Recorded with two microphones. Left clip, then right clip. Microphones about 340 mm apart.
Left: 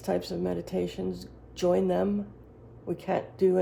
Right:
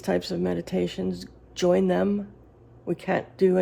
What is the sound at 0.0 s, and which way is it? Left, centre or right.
Speech, right.